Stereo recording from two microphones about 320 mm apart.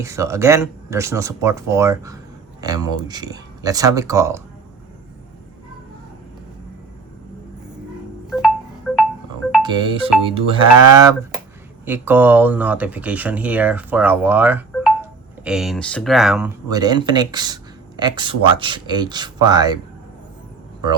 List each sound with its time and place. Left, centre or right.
0.0 s speech: centre
8.3 s wind chime: centre
9.6 s speech: centre